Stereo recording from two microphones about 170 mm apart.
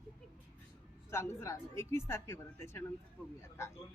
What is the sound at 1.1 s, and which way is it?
A woman's voice, 15° left (ahead or behind).